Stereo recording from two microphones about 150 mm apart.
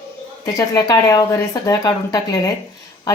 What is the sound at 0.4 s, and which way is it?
A woman's voice, 25° left (ahead or behind).